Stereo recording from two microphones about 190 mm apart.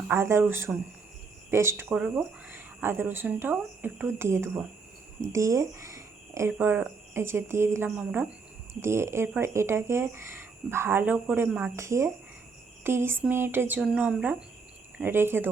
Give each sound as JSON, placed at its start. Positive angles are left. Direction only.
{"t": 0.1, "sound": "speech", "side_deg": -15}